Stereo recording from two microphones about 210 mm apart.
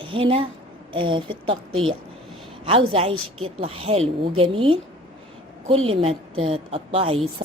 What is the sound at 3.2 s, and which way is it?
Speech, 85° right.